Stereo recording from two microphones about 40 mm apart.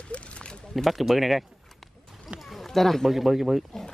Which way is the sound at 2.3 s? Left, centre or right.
Centre.